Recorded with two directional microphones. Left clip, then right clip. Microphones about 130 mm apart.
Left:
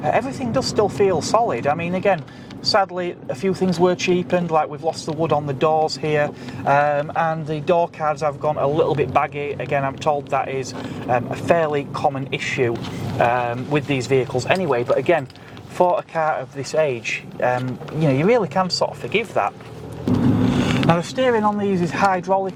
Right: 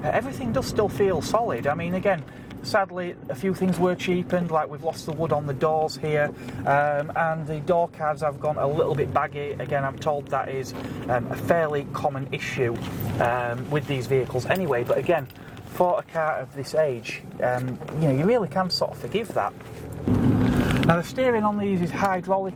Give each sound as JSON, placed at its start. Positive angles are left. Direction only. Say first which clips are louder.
{"t": 0.0, "sound": "speech", "louder": "left 5 dB", "side_deg": 45}
{"t": 15.8, "sound": "speech", "louder": "left 4 dB", "side_deg": 40}
{"t": 16.1, "sound": "speech", "louder": "left 4 dB", "side_deg": 55}
{"t": 18.0, "sound": "speech", "louder": "left 5 dB", "side_deg": 55}
{"t": 19.3, "sound": "speech", "louder": "left 5 dB", "side_deg": 45}